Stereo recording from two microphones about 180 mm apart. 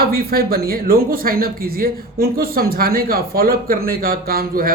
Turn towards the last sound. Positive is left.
turn(degrees=-55)  # may be behind; listen again after turning